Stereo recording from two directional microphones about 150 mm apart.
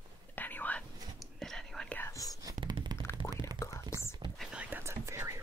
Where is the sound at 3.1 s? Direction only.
30° right (ahead or behind).